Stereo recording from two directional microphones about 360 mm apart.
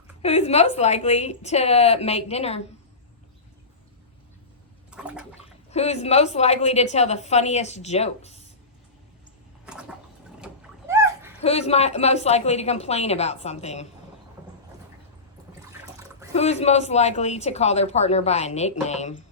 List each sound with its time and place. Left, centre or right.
0.2 s speech: centre
4.9 s toilet flush: centre
5.7 s speech: centre
10.4 s splash: centre
11.3 s speech: centre
16.3 s speech: centre